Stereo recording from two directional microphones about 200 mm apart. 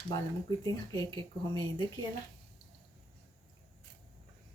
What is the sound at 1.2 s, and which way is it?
Speech, 20° right (ahead or behind).